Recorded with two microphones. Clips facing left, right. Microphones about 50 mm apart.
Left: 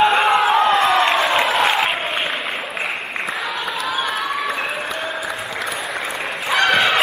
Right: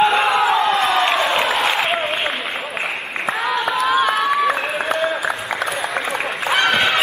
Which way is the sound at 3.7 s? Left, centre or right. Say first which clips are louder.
Right 7 dB; right.